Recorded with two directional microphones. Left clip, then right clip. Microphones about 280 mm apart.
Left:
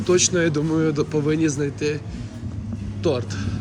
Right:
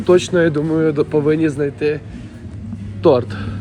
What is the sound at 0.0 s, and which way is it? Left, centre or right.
Speech, centre.